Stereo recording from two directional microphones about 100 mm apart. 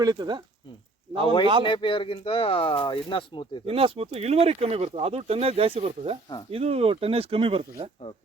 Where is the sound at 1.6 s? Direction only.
55° left (ahead or behind).